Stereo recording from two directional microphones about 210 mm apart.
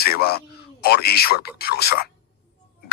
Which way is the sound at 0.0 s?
50° left (ahead or behind).